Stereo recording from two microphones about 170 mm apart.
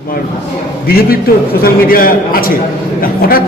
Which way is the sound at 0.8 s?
60° left (ahead or behind).